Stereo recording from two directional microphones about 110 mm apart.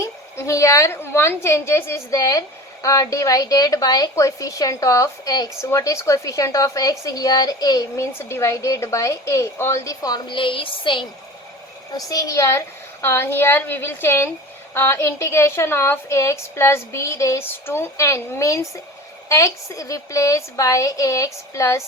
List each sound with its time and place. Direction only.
0.3 s a woman's voice: 30° left (ahead or behind)
8.2 s a woman's voice: 25° left (ahead or behind); by 11.0 s 50° left (ahead or behind)
11.9 s a woman's voice: 30° left (ahead or behind)